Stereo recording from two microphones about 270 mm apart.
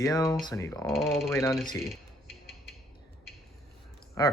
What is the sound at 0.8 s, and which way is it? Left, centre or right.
Speech, centre.